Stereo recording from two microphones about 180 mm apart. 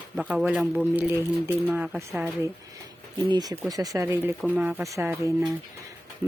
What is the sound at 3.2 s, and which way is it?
Speech, 20° right (ahead or behind).